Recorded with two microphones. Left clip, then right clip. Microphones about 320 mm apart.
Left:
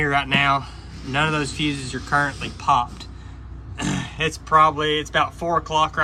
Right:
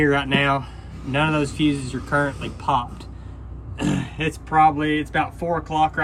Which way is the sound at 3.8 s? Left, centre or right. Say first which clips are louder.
Even; centre.